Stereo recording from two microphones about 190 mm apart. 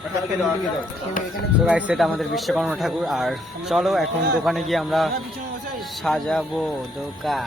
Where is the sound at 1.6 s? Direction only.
5° right (ahead or behind).